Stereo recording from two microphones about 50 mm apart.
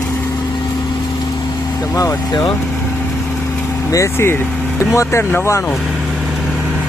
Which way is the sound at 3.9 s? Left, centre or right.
Left.